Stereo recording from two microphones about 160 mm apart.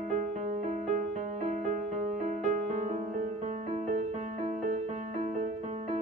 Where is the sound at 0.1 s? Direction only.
50° right (ahead or behind).